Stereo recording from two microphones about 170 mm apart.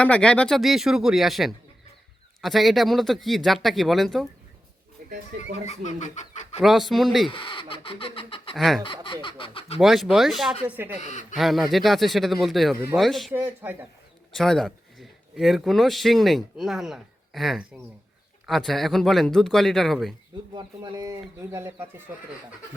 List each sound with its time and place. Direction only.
0.0 s speech: 5° left (ahead or behind)
5.6 s speech: 45° left (ahead or behind)
6.6 s speech: centre (ahead or behind)
7.3 s speech: 30° left (ahead or behind)
8.5 s speech: centre (ahead or behind)
8.8 s speech: 30° left (ahead or behind)
9.8 s speech: centre (ahead or behind)
11.0 s speech: 45° left (ahead or behind)
11.3 s speech: centre (ahead or behind)
13.3 s speech: 10° right (ahead or behind)
14.3 s speech: 5° left (ahead or behind)
20.5 s speech: 25° right (ahead or behind)